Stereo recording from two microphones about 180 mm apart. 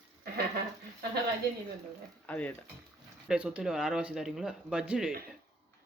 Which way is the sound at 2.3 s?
10° left (ahead or behind).